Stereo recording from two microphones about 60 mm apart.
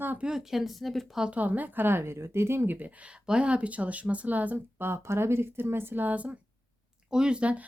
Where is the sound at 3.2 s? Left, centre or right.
Centre.